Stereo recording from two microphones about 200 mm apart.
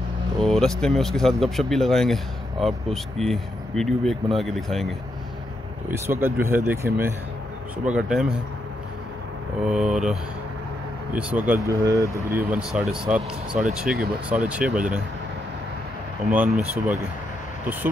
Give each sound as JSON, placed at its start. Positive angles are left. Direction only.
{"t": 0.4, "sound": "speech", "side_deg": 0}
{"t": 5.9, "sound": "speech", "side_deg": -10}
{"t": 9.7, "sound": "speech", "side_deg": -5}
{"t": 11.4, "sound": "speech", "side_deg": -15}
{"t": 16.3, "sound": "speech", "side_deg": -5}